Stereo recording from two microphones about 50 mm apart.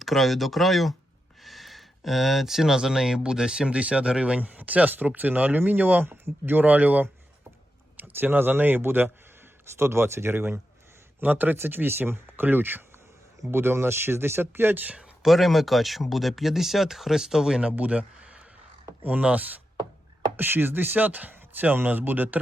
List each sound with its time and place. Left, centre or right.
0.0 s speech: centre
3.7 s speech: right
4.4 s speech: right
8.1 s speech: right
9.7 s speech: right
11.2 s speech: right
13.5 s speech: right
14.9 s speech: centre
17.6 s speech: right
20.3 s speech: right